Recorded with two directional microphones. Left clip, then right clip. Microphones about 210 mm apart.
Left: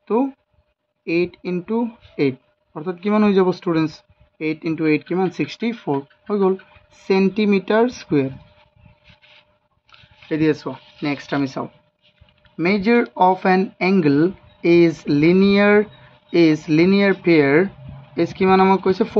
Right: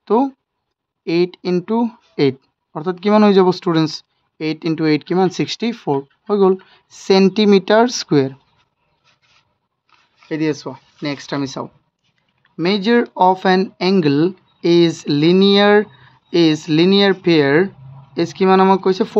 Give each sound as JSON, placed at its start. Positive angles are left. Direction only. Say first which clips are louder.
{"t": 0.0, "sound": "speech", "louder": "right 4 dB", "side_deg": -50}
{"t": 10.2, "sound": "speech", "louder": "left 1 dB", "side_deg": -20}